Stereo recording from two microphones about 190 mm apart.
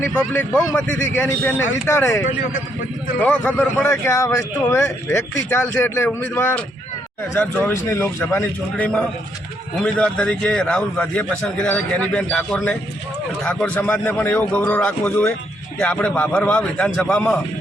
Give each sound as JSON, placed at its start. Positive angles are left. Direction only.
{"t": 0.3, "sound": "a man's voice", "side_deg": 5}
{"t": 3.8, "sound": "a man's voice", "side_deg": 15}
{"t": 7.9, "sound": "a man's voice", "side_deg": 10}